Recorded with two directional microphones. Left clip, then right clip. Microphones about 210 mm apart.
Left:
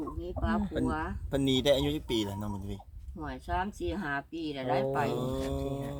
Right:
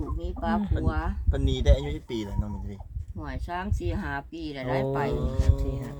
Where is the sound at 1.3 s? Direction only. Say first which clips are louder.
Left 3 dB; 40° left (ahead or behind).